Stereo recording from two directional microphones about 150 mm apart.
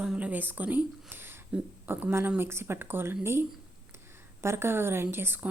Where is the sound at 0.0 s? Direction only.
10° right (ahead or behind).